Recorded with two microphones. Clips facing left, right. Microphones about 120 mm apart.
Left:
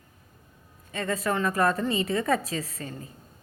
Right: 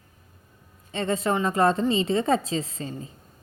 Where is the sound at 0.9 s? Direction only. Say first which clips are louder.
Right 3 dB; 25° right (ahead or behind).